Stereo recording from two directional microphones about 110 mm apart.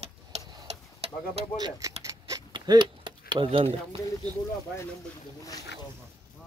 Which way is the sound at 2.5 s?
40° right (ahead or behind).